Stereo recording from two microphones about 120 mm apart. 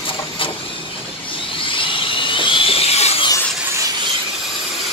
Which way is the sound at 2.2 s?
45° left (ahead or behind).